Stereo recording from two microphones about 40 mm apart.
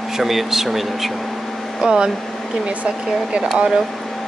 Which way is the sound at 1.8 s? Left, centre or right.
Centre.